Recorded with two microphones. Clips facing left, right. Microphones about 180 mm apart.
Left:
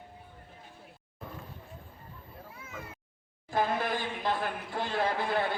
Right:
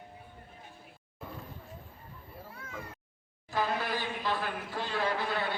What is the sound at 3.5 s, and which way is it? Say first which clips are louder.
A man's voice: left 2 dB; 50° left (ahead or behind).